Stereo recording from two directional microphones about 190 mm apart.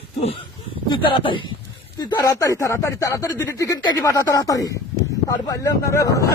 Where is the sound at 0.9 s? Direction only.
25° left (ahead or behind).